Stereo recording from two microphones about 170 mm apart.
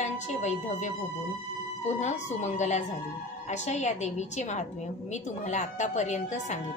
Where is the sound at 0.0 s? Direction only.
45° left (ahead or behind).